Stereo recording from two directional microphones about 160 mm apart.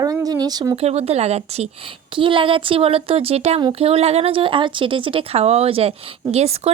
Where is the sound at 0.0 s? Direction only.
20° right (ahead or behind).